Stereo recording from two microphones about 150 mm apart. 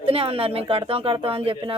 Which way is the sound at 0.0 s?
40° right (ahead or behind).